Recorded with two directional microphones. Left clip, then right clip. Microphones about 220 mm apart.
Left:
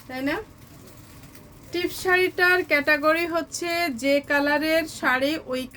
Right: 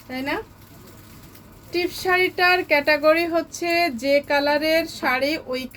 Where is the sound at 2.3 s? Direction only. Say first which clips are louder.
Right 2 dB; 10° left (ahead or behind).